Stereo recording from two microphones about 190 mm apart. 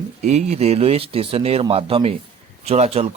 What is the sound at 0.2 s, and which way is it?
Speech, 35° right (ahead or behind).